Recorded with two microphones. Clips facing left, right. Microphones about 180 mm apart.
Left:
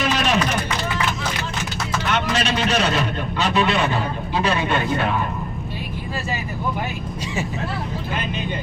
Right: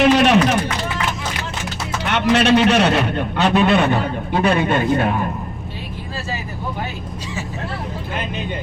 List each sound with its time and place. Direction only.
0.0 s run: 65° right (ahead or behind)
2.1 s a man's voice: 65° right (ahead or behind); by 5.0 s 50° right (ahead or behind)